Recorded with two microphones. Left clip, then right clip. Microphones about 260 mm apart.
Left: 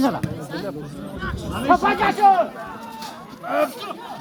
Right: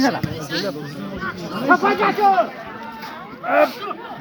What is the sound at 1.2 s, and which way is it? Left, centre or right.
Speech, centre.